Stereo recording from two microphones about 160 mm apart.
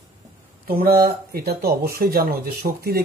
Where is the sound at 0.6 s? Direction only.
70° right (ahead or behind).